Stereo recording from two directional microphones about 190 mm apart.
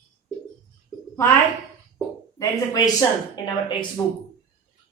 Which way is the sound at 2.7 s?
20° left (ahead or behind).